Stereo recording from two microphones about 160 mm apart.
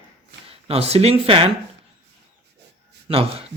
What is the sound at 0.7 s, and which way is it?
Speech, 40° right (ahead or behind).